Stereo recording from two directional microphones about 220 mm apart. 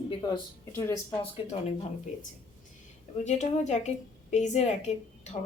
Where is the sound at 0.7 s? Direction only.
15° left (ahead or behind).